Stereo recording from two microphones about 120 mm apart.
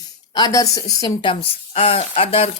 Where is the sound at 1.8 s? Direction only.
50° left (ahead or behind).